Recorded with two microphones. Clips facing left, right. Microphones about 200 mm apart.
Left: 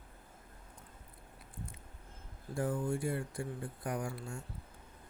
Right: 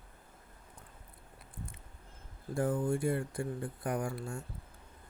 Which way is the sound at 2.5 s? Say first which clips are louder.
Right 3 dB; 55° right (ahead or behind).